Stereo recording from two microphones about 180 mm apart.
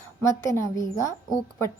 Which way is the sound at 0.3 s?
15° left (ahead or behind).